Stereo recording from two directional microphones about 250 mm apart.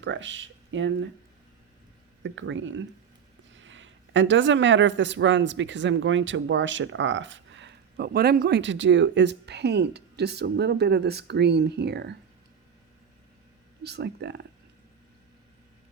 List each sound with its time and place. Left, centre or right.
0.0 s speech: right
2.2 s speech: right
13.8 s speech: right